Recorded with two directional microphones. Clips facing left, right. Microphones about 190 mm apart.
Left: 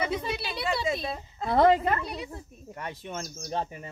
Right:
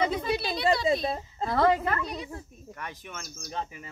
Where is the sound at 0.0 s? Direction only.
30° right (ahead or behind).